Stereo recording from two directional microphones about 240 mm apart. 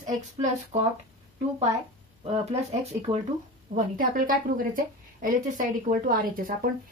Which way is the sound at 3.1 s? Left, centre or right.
Right.